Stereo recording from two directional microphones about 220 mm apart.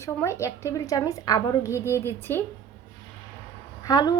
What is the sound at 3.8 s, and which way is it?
Speech, 20° left (ahead or behind).